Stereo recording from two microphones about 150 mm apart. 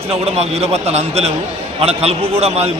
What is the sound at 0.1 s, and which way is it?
A man's voice, 45° right (ahead or behind).